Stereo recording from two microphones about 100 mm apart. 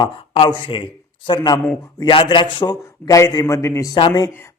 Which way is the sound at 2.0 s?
55° left (ahead or behind).